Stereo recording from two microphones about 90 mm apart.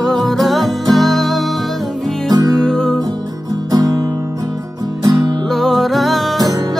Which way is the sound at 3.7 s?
45° right (ahead or behind).